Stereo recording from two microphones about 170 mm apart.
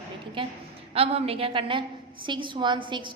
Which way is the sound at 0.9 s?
35° right (ahead or behind).